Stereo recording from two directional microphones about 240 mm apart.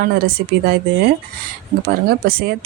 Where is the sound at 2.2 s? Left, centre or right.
Right.